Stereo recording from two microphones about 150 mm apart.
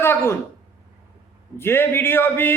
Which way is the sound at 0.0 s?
15° left (ahead or behind).